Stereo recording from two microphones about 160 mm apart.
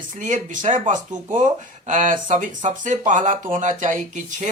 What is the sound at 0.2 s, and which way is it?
Speech, 50° right (ahead or behind).